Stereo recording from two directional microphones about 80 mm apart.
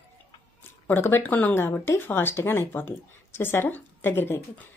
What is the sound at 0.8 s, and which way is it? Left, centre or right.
Speech, left.